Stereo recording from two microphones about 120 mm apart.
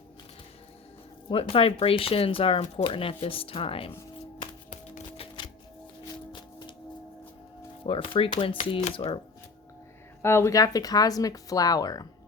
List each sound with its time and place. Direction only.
1.3 s speech: 50° left (ahead or behind)
5.1 s music: 50° left (ahead or behind)
7.9 s speech: 45° left (ahead or behind)
10.2 s speech: 20° left (ahead or behind)